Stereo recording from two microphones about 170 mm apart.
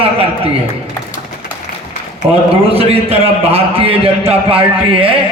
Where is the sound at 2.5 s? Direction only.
35° right (ahead or behind).